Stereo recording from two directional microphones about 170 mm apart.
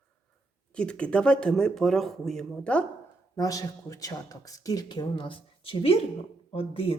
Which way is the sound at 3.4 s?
20° left (ahead or behind).